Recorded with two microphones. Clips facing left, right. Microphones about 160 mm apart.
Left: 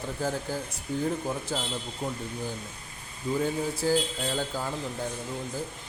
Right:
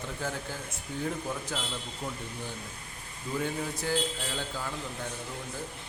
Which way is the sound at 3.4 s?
30° left (ahead or behind).